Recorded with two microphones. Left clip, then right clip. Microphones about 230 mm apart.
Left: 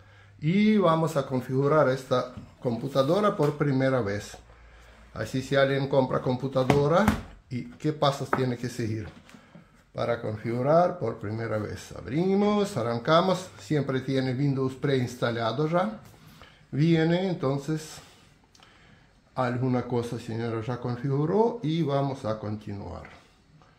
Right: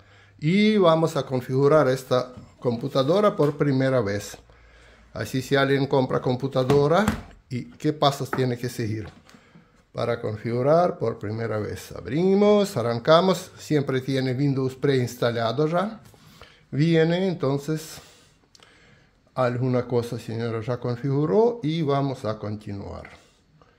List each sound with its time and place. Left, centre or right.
0.4 s speech: right
19.3 s speech: right